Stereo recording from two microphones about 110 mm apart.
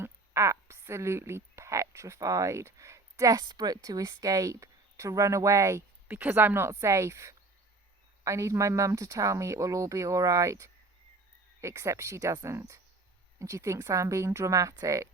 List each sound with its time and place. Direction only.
0.0 s a woman's voice: 25° right (ahead or behind)
6.1 s speech: 15° right (ahead or behind)